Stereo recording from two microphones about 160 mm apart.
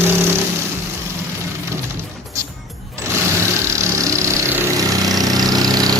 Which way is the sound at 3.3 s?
20° right (ahead or behind).